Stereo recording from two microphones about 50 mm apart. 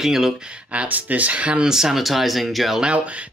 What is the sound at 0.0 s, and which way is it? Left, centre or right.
Speech, centre.